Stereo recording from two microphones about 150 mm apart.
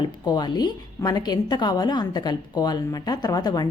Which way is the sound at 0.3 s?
30° left (ahead or behind).